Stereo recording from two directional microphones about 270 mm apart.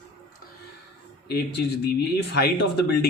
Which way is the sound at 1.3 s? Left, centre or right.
Left.